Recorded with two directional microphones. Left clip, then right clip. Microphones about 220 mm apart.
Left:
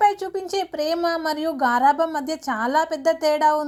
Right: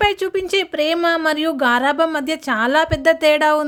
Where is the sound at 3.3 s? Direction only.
45° right (ahead or behind).